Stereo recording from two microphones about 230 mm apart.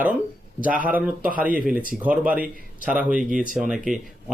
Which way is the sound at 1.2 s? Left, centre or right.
Right.